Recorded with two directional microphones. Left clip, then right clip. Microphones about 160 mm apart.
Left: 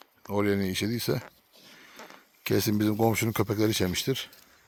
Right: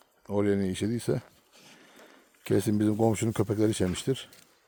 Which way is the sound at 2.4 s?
5° right (ahead or behind).